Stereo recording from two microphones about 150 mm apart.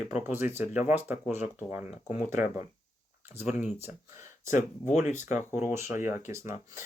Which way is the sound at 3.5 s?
50° left (ahead or behind).